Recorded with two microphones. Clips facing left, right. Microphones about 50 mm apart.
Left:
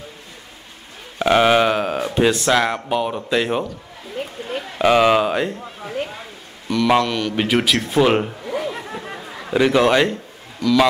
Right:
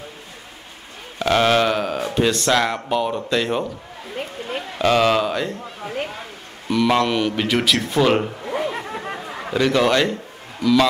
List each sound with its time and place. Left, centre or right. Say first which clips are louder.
1.2 s speech: left 2 dB; centre
4.2 s a sound: left 1 dB; right
4.7 s speech: left 3 dB; centre
5.9 s a sound: left 1 dB; right
7.0 s mantra: right 1 dB; centre
7.3 s speech: left 1 dB; centre
8.5 s a sound: right 1 dB; right
9.5 s speech: left 2 dB; centre
10.6 s mantra: right 1 dB; centre